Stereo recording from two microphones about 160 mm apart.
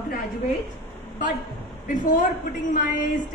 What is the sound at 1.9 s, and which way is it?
Speech, 55° left (ahead or behind).